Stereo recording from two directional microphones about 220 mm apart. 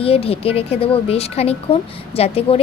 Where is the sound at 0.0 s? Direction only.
25° left (ahead or behind).